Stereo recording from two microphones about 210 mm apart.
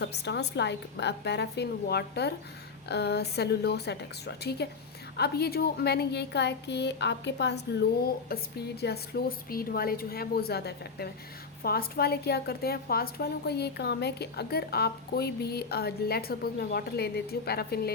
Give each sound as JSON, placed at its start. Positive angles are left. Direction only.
{"t": 0.0, "sound": "a woman's voice", "side_deg": 55}